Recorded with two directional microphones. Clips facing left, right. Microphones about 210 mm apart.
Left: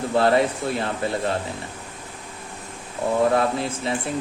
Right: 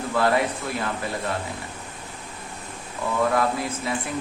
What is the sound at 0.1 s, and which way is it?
Speech, 30° left (ahead or behind).